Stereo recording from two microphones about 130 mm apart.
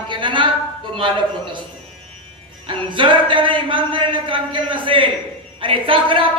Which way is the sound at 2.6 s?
40° right (ahead or behind).